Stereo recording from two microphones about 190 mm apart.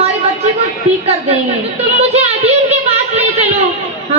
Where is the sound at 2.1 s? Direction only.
35° right (ahead or behind).